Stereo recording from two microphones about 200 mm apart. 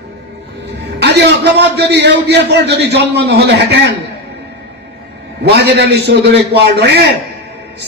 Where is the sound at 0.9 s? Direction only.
60° right (ahead or behind).